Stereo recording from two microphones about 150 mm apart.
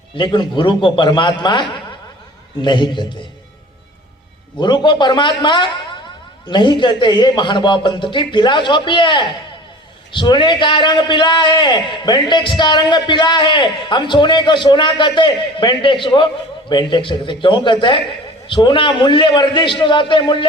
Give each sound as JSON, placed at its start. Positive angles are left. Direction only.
{"t": 0.2, "sound": "a man's voice", "side_deg": 30}
{"t": 4.5, "sound": "a man's voice", "side_deg": 30}